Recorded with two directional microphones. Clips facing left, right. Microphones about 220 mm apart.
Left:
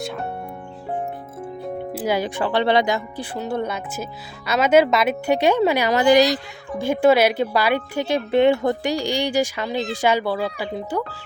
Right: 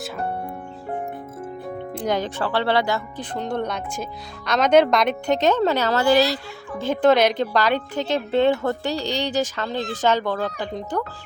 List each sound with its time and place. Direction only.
1.9 s speech: 5° left (ahead or behind)
3.3 s speech: 5° left (ahead or behind)